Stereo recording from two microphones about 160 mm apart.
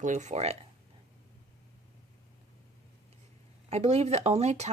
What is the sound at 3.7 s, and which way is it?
Speech, 40° right (ahead or behind).